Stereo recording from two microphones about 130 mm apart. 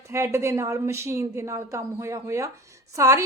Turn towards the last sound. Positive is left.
turn(degrees=-25)  # may be behind; listen again after turning